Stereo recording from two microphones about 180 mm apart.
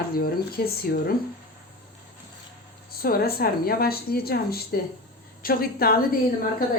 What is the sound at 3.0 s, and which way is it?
A woman's voice, 55° left (ahead or behind).